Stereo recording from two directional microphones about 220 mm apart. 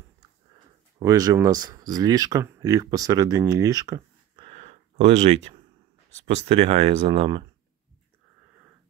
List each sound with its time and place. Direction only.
0.9 s speech: 15° right (ahead or behind)
4.5 s a sound: 30° right (ahead or behind)
6.2 s speech: 30° right (ahead or behind)